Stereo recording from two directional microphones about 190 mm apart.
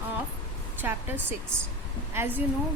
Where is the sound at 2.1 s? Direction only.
10° right (ahead or behind).